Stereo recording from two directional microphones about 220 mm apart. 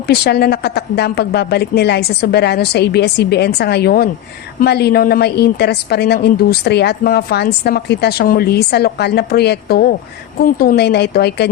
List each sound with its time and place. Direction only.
0.1 s a woman's voice: 45° left (ahead or behind)